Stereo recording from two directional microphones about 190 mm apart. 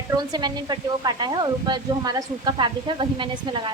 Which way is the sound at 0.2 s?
20° right (ahead or behind).